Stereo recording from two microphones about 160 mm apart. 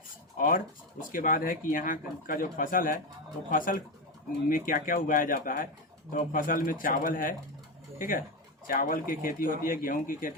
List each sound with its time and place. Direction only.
0.3 s speech: 60° left (ahead or behind)